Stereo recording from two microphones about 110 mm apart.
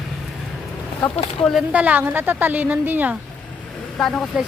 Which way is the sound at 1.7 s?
15° right (ahead or behind).